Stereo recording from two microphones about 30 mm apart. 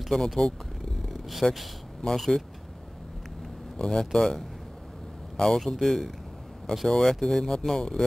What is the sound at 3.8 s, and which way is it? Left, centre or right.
Speech, left.